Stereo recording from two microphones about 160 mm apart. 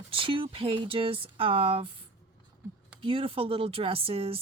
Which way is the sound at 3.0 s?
35° right (ahead or behind).